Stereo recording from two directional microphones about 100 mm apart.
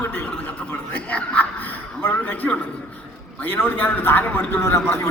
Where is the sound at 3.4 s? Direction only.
15° left (ahead or behind).